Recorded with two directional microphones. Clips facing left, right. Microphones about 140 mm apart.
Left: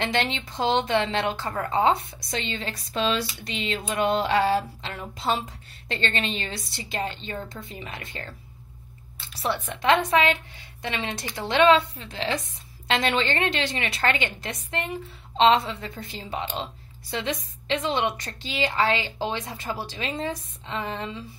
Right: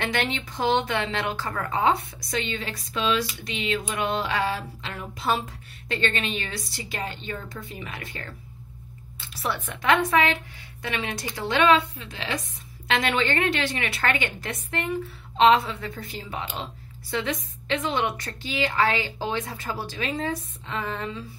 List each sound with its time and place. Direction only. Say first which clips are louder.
0.0 s a woman's voice: left 1 dB; 25° left (ahead or behind)
9.4 s a woman's voice: left 2 dB; 25° left (ahead or behind)